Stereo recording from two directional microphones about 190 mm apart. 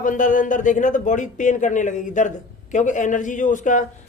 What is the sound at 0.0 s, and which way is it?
Speech, 45° left (ahead or behind).